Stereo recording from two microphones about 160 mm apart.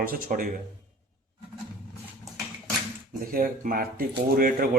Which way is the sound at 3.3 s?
60° right (ahead or behind).